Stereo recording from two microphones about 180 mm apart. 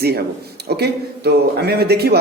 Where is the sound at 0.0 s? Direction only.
60° right (ahead or behind).